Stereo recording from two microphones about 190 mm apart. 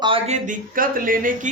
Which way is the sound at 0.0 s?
30° right (ahead or behind).